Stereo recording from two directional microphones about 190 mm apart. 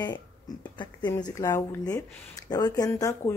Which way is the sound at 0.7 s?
20° left (ahead or behind).